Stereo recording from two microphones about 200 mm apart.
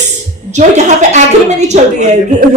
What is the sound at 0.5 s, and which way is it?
A woman's voice, 35° right (ahead or behind).